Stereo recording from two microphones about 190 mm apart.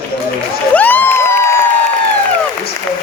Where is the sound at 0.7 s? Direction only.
10° left (ahead or behind).